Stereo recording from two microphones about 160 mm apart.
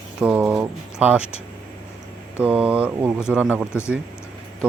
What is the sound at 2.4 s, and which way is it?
Speech, 5° right (ahead or behind).